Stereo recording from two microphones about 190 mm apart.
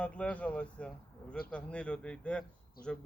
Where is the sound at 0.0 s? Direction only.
5° left (ahead or behind).